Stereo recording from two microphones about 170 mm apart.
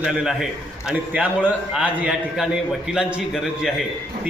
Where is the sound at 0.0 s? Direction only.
5° right (ahead or behind).